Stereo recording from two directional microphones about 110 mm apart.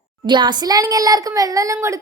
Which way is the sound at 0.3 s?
40° right (ahead or behind).